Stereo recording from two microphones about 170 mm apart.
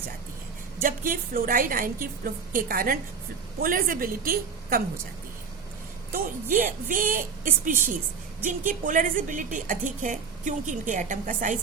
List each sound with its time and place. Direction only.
0.8 s a woman's voice: 55° right (ahead or behind)
6.6 s a woman's voice: 55° right (ahead or behind)